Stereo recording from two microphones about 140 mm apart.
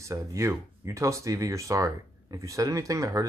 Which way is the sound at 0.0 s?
20° right (ahead or behind).